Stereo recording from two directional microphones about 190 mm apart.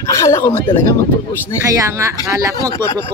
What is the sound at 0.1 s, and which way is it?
Speech, 15° left (ahead or behind).